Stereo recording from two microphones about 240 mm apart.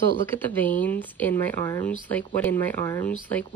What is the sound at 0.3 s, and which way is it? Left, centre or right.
Speech, centre.